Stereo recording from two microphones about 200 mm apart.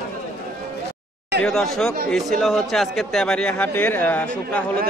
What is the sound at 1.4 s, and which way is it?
A man's voice, centre (ahead or behind).